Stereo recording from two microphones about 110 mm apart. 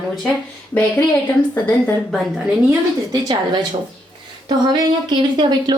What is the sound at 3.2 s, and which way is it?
A woman's voice, 40° right (ahead or behind).